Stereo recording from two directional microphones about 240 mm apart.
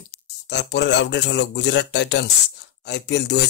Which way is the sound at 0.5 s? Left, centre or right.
Left.